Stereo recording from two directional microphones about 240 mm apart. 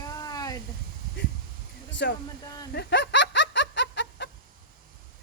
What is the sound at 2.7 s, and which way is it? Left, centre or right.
Snicker, left.